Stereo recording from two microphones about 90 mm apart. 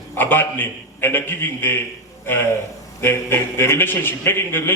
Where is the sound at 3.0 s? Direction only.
25° left (ahead or behind).